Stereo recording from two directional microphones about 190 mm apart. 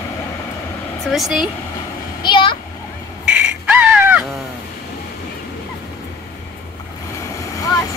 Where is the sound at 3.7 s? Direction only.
10° right (ahead or behind).